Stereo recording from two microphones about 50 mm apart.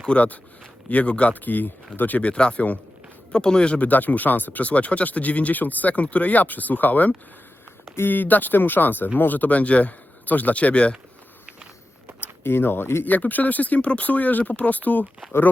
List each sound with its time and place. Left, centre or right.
0.0 s speech: left
2.2 s speech: left
3.8 s speech: left
12.4 s speech: left
13.1 s speech: left